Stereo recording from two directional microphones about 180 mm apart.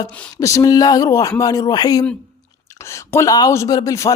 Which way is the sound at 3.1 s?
20° left (ahead or behind).